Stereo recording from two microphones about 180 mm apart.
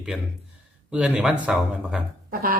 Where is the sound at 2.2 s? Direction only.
55° right (ahead or behind).